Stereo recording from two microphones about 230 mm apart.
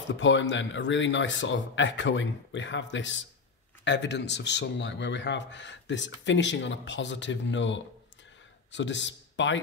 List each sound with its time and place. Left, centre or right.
0.2 s speech: left